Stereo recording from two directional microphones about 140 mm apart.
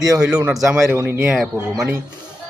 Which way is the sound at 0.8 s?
15° right (ahead or behind).